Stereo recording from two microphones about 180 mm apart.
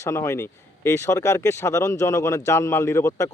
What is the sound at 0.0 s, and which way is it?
Speech, 15° left (ahead or behind).